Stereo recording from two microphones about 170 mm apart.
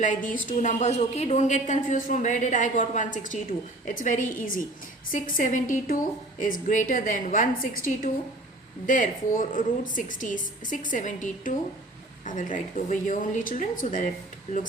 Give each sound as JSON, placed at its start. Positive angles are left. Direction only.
{"t": 0.0, "sound": "a woman's voice", "side_deg": 50}